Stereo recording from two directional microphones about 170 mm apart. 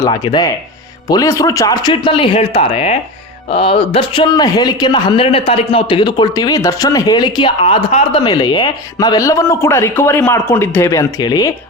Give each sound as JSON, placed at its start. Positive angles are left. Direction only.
{"t": 0.0, "sound": "a man's voice", "side_deg": 25}